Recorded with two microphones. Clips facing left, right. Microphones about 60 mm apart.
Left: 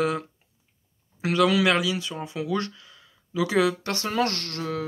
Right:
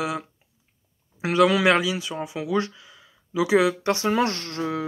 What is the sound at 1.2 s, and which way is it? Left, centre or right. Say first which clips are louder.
Speech: right 2 dB; right.